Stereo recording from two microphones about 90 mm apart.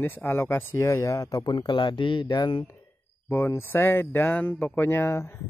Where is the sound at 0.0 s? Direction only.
20° left (ahead or behind).